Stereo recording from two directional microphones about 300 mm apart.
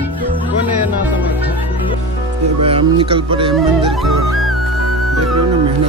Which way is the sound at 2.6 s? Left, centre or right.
Centre.